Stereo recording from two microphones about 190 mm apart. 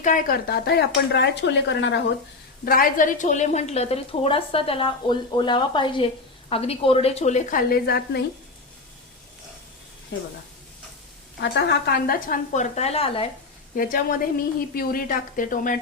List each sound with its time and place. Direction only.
0.0 s speech: 45° left (ahead or behind); by 2.0 s 70° left (ahead or behind)
2.6 s a woman's voice: 45° left (ahead or behind)
11.3 s a woman's voice: 60° left (ahead or behind); by 13.2 s 30° left (ahead or behind)
13.7 s a woman's voice: 50° left (ahead or behind)